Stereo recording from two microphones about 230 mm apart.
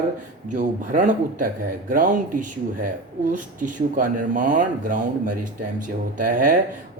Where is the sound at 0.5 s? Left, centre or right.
Right.